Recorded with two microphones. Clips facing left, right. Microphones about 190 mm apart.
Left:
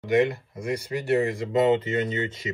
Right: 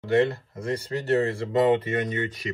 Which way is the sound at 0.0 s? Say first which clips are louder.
Even; 15° left (ahead or behind).